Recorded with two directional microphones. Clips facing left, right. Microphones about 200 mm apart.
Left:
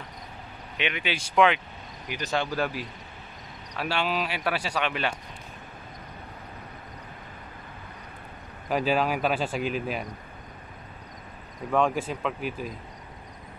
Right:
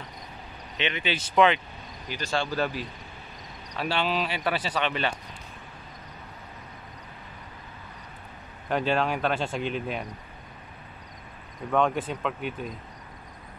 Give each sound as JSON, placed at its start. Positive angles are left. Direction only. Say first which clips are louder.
{"t": 0.7, "sound": "speech", "louder": "right 1 dB", "side_deg": 10}
{"t": 8.6, "sound": "speech", "louder": "left 1 dB", "side_deg": 5}
{"t": 11.7, "sound": "speech", "louder": "even", "side_deg": 0}